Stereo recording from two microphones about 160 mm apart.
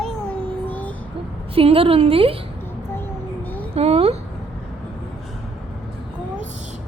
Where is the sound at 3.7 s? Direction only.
40° right (ahead or behind).